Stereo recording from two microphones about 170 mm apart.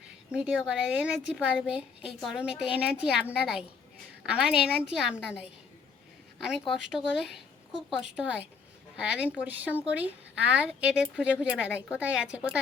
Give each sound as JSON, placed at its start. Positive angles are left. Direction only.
{"t": 0.3, "sound": "a woman's voice", "side_deg": -5}